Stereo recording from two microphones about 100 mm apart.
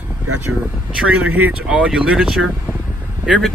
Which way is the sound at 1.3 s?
15° right (ahead or behind).